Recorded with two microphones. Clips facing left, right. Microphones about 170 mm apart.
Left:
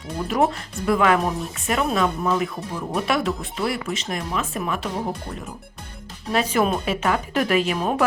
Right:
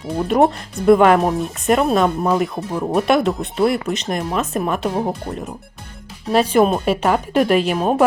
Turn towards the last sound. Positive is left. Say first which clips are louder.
# right 5 dB
turn(degrees=-30)  # may be behind; listen again after turning